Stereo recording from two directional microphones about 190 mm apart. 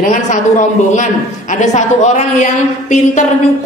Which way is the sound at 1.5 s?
40° left (ahead or behind).